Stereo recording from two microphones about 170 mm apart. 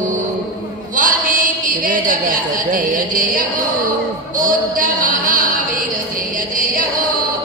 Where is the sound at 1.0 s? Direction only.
50° right (ahead or behind).